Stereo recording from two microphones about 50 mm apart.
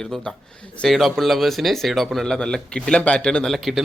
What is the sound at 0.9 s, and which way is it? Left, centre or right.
A man's voice, centre.